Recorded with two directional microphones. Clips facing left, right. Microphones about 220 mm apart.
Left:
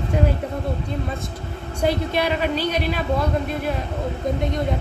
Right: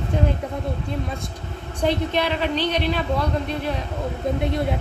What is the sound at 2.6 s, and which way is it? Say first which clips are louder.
Speech: even; 10° left (ahead or behind).